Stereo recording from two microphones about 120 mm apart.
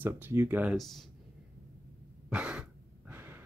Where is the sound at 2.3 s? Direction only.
10° right (ahead or behind).